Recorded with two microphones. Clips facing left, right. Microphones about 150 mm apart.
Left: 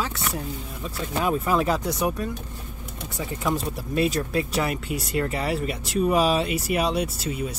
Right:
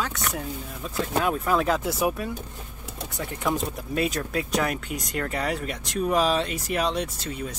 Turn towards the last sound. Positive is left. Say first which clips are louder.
# left 4 dB
turn(degrees=10)  # may be behind; listen again after turning